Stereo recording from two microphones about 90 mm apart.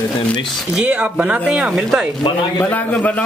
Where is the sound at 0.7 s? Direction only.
15° right (ahead or behind).